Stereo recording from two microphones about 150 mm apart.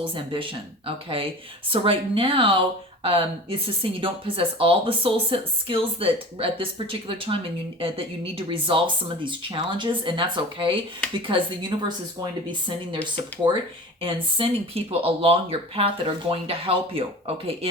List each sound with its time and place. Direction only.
0.0 s speech: 35° right (ahead or behind)